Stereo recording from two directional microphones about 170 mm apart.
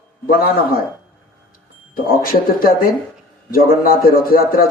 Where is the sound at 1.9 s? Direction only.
60° left (ahead or behind).